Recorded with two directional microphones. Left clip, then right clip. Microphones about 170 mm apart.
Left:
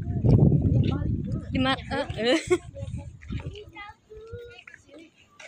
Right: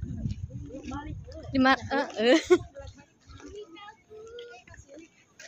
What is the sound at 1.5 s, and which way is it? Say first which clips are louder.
Speech: right 3 dB; 25° right (ahead or behind).